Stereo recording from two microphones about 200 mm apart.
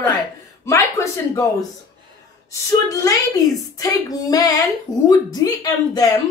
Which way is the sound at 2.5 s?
15° left (ahead or behind).